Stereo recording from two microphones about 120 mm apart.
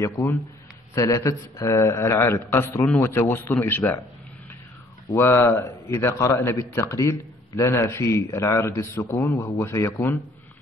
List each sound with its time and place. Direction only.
0.0 s a man's voice: 20° left (ahead or behind)
5.1 s a man's voice: 20° left (ahead or behind)